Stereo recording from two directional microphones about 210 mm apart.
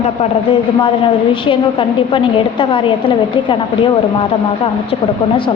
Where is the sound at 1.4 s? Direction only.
25° left (ahead or behind).